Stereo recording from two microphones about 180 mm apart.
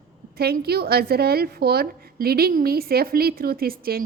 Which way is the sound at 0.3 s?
60° right (ahead or behind).